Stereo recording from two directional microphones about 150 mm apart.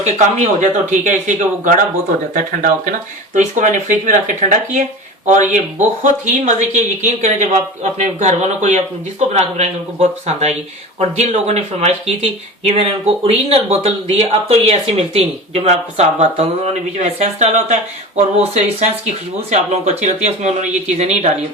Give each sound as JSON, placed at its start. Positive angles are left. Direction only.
{"t": 0.0, "sound": "speech", "side_deg": -50}